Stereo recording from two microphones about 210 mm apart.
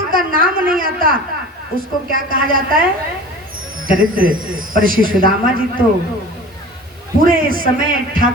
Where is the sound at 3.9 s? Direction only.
40° right (ahead or behind).